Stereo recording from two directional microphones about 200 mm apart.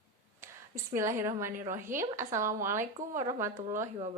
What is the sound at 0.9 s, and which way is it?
A woman's voice, 15° right (ahead or behind).